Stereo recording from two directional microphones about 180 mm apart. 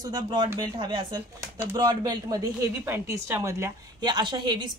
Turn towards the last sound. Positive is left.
turn(degrees=-25)  # may be behind; listen again after turning